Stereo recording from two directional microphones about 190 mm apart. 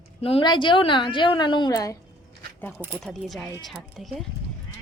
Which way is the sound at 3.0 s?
Centre (ahead or behind).